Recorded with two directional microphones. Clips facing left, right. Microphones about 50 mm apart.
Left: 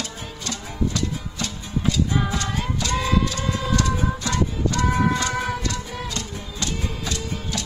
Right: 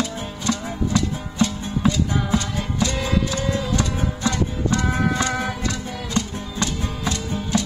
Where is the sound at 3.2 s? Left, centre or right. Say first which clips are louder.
Right 2 dB; right.